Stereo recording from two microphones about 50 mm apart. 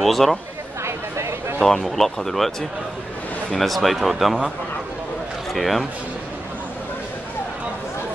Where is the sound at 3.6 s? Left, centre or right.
Centre.